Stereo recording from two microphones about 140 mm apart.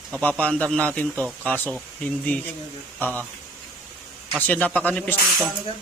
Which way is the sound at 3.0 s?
10° left (ahead or behind).